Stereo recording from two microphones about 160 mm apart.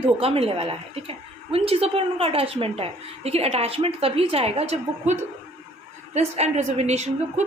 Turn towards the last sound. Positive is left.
turn(degrees=-45)  # may be behind; listen again after turning